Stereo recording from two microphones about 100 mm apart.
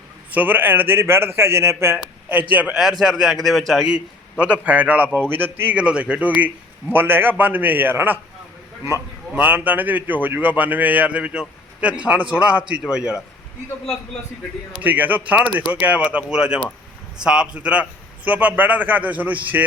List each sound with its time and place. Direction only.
0.3 s a man's voice: 15° right (ahead or behind)
3.0 s a man's voice: 5° right (ahead or behind)
3.8 s a man's voice: 10° right (ahead or behind)
9.3 s a man's voice: 15° right (ahead or behind)
14.8 s a man's voice: 15° right (ahead or behind)